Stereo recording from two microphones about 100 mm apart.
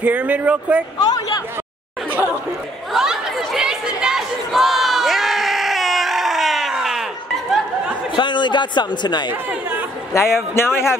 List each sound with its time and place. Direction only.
0.0 s speech: 15° right (ahead or behind)
0.9 s speech: 40° left (ahead or behind)
2.0 s chatter: 20° right (ahead or behind)
2.9 s chatter: 5° right (ahead or behind)
8.2 s speech: 50° left (ahead or behind)
9.3 s speech: 20° right (ahead or behind)
10.1 s a man's voice: 30° left (ahead or behind)